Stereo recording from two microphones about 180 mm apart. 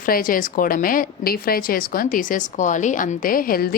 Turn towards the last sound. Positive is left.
turn(degrees=55)  # may be behind; listen again after turning